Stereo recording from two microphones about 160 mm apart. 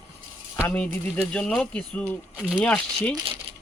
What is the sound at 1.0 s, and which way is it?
Speech, 5° left (ahead or behind).